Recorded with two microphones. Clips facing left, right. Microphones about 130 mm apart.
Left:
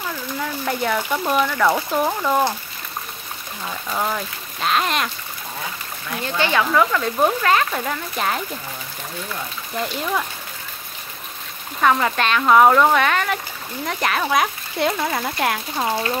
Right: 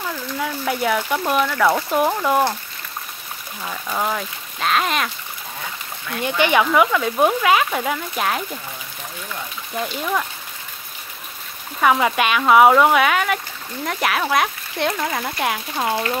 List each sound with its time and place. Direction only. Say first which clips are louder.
0.1 s speech: right 1 dB; 5° right (ahead or behind)
3.6 s speech: right 1 dB; centre (ahead or behind)
6.2 s speech: right 3 dB; 15° right (ahead or behind)
9.8 s speech: even; centre (ahead or behind)
11.8 s speech: right 1 dB; 10° right (ahead or behind)